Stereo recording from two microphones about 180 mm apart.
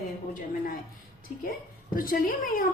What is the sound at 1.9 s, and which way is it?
Speech, 50° left (ahead or behind).